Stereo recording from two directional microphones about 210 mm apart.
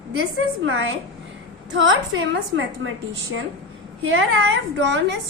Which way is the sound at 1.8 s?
65° right (ahead or behind).